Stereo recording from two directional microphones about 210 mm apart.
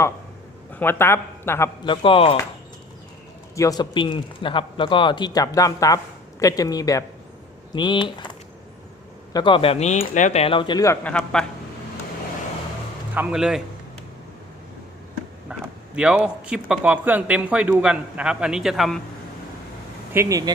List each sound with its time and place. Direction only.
0.7 s a man's voice: 10° left (ahead or behind); by 2.4 s 25° left (ahead or behind)
3.5 s a man's voice: 15° left (ahead or behind)
9.3 s a man's voice: 20° left (ahead or behind)
11.0 s speech: 5° left (ahead or behind)
13.1 s speech: 5° right (ahead or behind)
15.5 s speech: 5° right (ahead or behind)
20.1 s speech: 15° right (ahead or behind)